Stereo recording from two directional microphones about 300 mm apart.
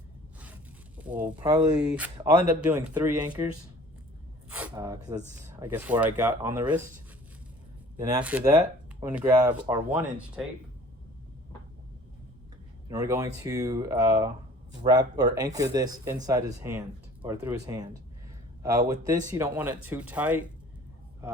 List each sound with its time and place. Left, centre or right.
0.3 s speech: centre
7.9 s speech: centre
12.9 s speech: centre
18.9 s speech: centre